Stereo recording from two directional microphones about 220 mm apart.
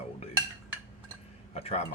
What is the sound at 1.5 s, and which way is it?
Speech, 30° left (ahead or behind).